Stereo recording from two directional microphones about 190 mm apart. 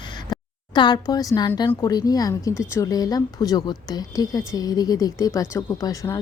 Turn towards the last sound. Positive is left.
turn(degrees=15)  # may be behind; listen again after turning